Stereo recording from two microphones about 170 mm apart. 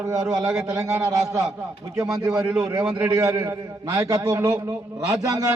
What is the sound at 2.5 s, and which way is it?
Speech, 5° right (ahead or behind).